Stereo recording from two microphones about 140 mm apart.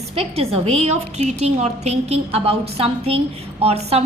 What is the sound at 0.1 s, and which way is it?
A woman's voice, 45° right (ahead or behind).